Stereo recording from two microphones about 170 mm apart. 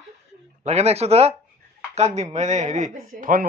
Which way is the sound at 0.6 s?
40° right (ahead or behind).